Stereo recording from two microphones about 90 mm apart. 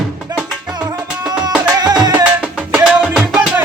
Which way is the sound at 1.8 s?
45° right (ahead or behind).